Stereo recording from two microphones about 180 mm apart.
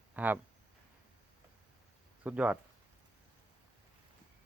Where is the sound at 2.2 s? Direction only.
10° right (ahead or behind).